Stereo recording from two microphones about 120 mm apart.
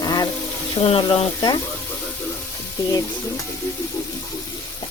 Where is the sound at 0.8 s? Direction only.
50° left (ahead or behind).